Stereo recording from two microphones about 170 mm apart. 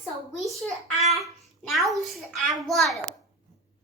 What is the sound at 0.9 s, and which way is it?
A child's voice, centre (ahead or behind).